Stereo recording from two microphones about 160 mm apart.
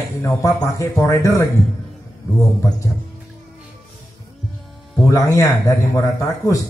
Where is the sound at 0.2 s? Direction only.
20° left (ahead or behind).